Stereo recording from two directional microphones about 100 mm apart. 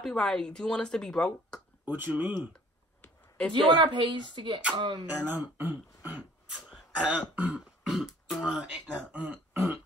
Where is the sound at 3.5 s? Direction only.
50° right (ahead or behind).